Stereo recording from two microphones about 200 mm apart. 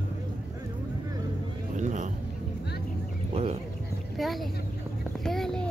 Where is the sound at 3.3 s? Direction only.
30° right (ahead or behind).